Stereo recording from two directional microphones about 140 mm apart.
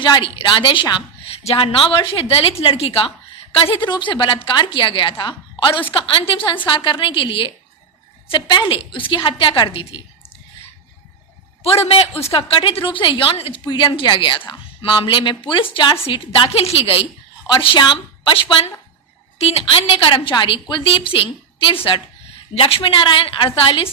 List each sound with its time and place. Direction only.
0.0 s a woman's voice: 35° left (ahead or behind)
11.6 s a woman's voice: 45° left (ahead or behind)
22.5 s a woman's voice: 40° left (ahead or behind)